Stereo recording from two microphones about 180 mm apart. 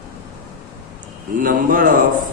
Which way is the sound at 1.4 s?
50° right (ahead or behind).